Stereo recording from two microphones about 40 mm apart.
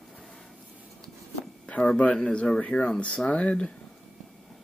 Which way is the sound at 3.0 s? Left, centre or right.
Left.